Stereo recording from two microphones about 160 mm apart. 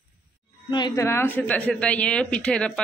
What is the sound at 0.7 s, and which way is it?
Speech, 25° left (ahead or behind).